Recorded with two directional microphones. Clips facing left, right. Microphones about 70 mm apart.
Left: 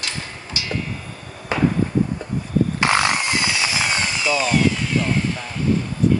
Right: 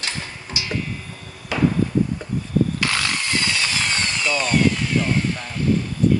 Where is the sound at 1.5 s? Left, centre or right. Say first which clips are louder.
Left 1 dB; left.